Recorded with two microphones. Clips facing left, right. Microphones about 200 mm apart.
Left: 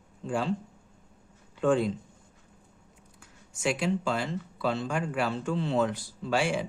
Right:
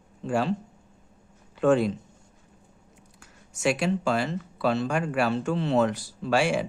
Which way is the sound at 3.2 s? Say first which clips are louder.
Right 4 dB; 75° right (ahead or behind).